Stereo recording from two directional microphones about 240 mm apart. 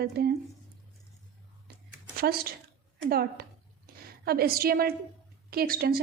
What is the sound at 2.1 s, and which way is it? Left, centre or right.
A woman's voice, right.